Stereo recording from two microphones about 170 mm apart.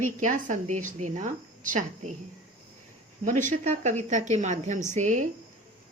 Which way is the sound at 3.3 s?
50° right (ahead or behind).